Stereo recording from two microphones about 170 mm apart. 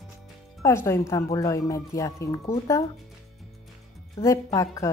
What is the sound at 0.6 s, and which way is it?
Speech, 15° left (ahead or behind).